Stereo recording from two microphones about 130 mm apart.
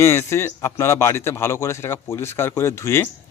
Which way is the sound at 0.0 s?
20° left (ahead or behind).